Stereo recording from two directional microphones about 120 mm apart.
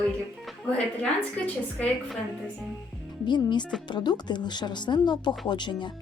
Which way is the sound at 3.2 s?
40° left (ahead or behind).